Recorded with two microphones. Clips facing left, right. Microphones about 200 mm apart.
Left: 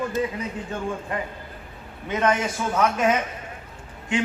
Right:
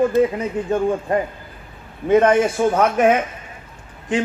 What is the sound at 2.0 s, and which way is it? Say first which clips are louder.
A man's voice: right 9 dB; 55° right (ahead or behind).